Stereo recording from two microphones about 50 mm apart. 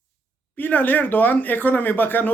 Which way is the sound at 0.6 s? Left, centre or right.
Left.